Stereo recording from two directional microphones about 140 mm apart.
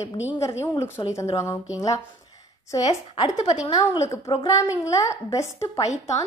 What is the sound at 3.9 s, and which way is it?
Speech, 20° left (ahead or behind).